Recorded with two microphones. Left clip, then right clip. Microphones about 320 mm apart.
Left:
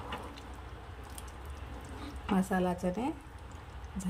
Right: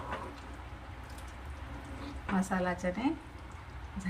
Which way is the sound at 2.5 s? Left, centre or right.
Left.